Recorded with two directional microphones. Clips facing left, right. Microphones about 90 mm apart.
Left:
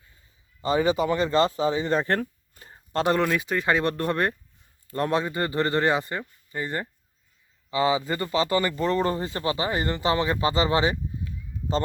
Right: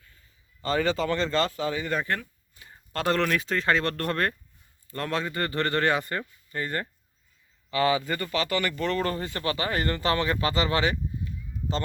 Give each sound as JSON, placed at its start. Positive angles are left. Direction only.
{"t": 0.6, "sound": "speech", "side_deg": 15}
{"t": 2.7, "sound": "speech", "side_deg": 20}